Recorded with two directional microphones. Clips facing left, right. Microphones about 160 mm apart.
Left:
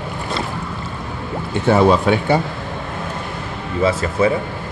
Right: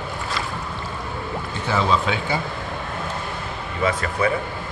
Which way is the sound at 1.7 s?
55° left (ahead or behind).